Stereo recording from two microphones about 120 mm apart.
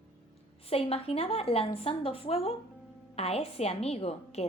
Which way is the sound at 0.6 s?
55° left (ahead or behind).